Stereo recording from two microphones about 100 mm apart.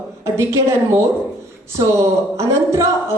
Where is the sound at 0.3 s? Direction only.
30° right (ahead or behind).